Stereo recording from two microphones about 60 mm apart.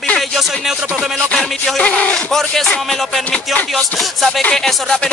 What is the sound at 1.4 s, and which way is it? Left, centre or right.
Speech, centre.